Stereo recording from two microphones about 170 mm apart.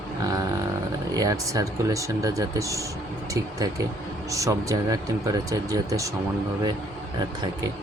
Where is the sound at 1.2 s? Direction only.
20° right (ahead or behind).